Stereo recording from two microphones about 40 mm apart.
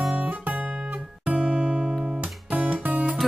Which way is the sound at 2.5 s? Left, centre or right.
Right.